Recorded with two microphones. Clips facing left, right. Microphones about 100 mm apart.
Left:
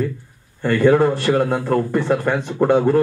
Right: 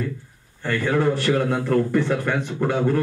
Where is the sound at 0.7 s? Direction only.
45° left (ahead or behind).